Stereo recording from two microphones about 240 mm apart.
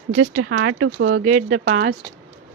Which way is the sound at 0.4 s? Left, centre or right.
Right.